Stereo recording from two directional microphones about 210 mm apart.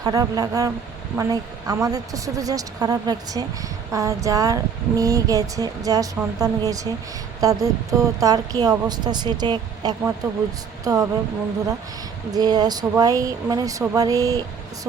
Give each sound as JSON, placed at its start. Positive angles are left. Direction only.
{"t": 0.0, "sound": "a woman's voice", "side_deg": -15}
{"t": 12.3, "sound": "speech", "side_deg": -20}